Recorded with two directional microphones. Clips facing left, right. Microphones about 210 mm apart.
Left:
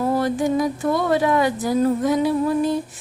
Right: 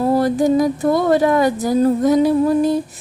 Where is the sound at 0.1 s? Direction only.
35° right (ahead or behind).